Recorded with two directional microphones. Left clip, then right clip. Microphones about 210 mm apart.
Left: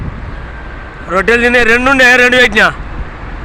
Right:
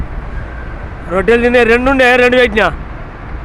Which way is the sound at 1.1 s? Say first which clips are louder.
Left 1 dB; 5° right (ahead or behind).